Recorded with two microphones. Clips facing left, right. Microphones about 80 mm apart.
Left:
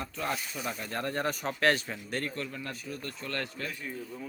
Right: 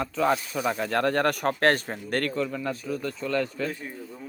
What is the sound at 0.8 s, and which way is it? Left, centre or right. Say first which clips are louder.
Speech: right 9 dB; right.